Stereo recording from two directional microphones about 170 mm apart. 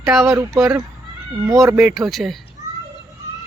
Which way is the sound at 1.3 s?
20° right (ahead or behind).